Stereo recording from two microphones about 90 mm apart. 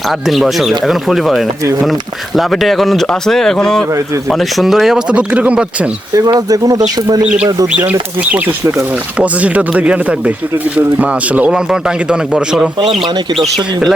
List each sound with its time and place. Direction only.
0.1 s a man's voice: centre (ahead or behind)
6.1 s speech: 45° right (ahead or behind)
7.2 s a man's voice: 10° right (ahead or behind)